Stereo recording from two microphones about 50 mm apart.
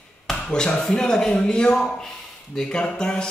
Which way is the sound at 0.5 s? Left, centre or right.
Centre.